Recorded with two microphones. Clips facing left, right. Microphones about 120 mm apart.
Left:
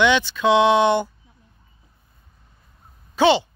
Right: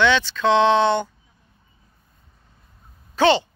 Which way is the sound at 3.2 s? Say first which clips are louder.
Left 1 dB; 10° left (ahead or behind).